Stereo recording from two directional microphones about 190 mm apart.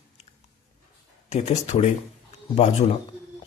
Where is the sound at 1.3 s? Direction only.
35° left (ahead or behind).